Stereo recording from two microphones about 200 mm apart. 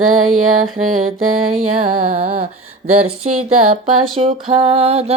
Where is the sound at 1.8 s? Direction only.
30° right (ahead or behind).